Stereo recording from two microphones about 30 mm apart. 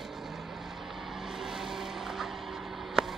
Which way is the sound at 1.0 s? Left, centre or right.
Centre.